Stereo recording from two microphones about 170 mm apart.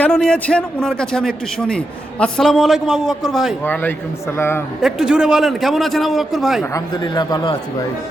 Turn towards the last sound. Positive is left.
turn(degrees=25)  # may be behind; listen again after turning